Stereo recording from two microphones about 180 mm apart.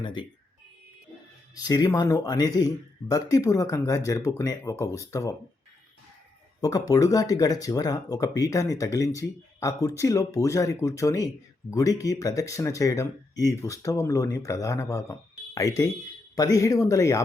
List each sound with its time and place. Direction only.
0.0 s speech: 25° left (ahead or behind)
1.5 s speech: 20° left (ahead or behind)
6.6 s speech: 20° left (ahead or behind)